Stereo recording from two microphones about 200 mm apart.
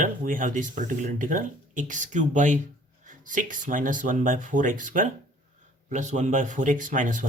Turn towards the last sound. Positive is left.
turn(degrees=-40)  # may be behind; listen again after turning